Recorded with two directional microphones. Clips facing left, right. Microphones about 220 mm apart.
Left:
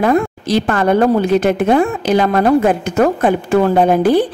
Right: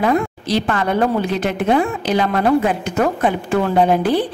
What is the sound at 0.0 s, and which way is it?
A woman's voice, 45° left (ahead or behind).